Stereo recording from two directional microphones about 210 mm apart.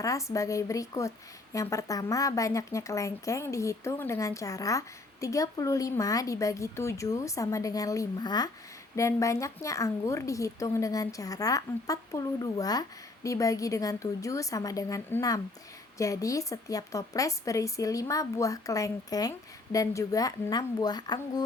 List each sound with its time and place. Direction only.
0.0 s speech: 15° left (ahead or behind)